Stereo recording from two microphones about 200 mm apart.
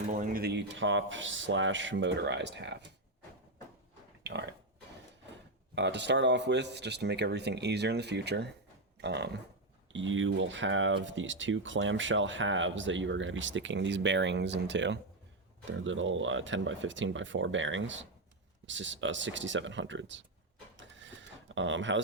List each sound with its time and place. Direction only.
0.1 s speech: 40° right (ahead or behind)
0.4 s speech: 65° right (ahead or behind)
4.2 s pig: 60° right (ahead or behind)
5.7 s speech: 60° right (ahead or behind)
9.0 s a sound: 60° right (ahead or behind)
9.9 s speech: 70° right (ahead or behind)
20.7 s a sound: 65° right (ahead or behind)